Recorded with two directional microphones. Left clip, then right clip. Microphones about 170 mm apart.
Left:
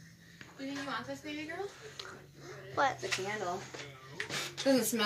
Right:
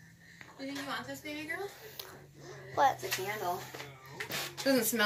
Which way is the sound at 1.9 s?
35° left (ahead or behind).